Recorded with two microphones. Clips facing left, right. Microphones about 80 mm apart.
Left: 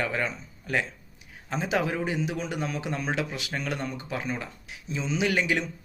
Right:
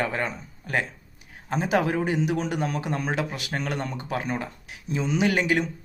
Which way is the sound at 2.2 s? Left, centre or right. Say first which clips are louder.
Right 5 dB; right.